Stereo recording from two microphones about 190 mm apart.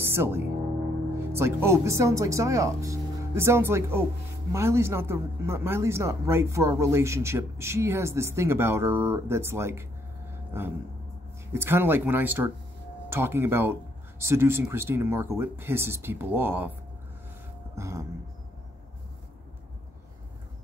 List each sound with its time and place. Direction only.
0.0 s a man's voice: 10° right (ahead or behind)
11.5 s a man's voice: 10° right (ahead or behind)
17.7 s a man's voice: 15° right (ahead or behind)